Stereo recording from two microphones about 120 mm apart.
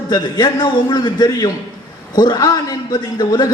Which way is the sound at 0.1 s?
35° left (ahead or behind).